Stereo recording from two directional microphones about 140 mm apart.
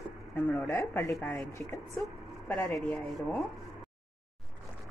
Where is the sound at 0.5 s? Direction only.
15° left (ahead or behind).